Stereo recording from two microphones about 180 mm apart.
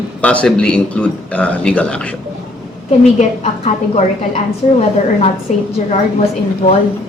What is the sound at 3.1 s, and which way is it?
A woman's voice, 35° left (ahead or behind).